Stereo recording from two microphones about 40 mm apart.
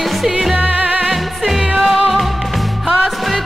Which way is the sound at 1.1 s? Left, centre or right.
Centre.